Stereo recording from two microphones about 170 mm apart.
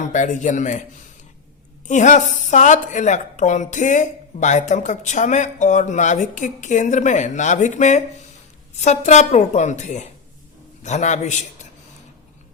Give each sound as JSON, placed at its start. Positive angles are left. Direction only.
{"t": 0.1, "sound": "a woman's voice", "side_deg": 45}
{"t": 1.9, "sound": "a woman's voice", "side_deg": 45}